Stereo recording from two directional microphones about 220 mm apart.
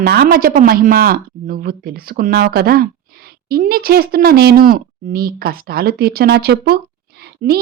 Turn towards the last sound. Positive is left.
turn(degrees=-40)  # may be behind; listen again after turning